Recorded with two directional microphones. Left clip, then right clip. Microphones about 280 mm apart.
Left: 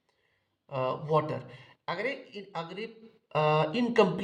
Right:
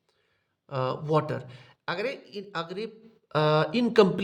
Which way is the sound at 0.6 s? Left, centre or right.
Right.